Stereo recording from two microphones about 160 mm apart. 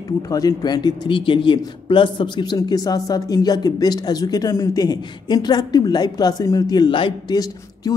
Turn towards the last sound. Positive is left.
turn(degrees=25)  # may be behind; listen again after turning